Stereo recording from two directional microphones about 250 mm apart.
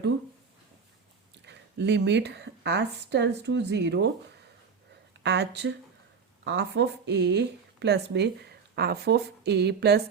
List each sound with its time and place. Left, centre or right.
1.5 s a woman's voice: right
5.2 s a woman's voice: right